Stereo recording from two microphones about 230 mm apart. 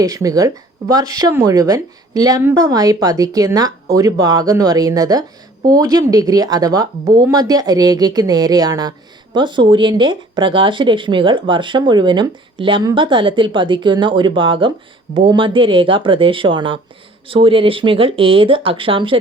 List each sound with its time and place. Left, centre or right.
0.0 s speech: centre